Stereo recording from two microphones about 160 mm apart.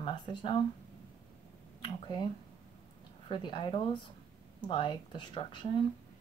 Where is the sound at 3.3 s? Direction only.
30° left (ahead or behind).